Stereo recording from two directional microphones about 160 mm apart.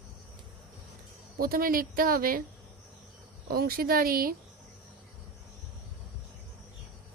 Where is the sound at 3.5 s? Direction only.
70° right (ahead or behind).